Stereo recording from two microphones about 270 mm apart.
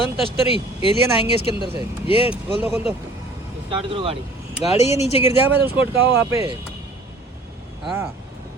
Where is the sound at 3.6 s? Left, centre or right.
Centre.